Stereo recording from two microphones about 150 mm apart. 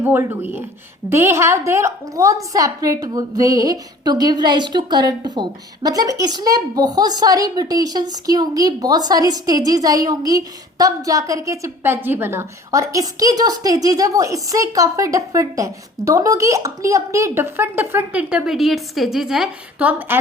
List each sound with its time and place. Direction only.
0.0 s a woman's voice: 15° right (ahead or behind)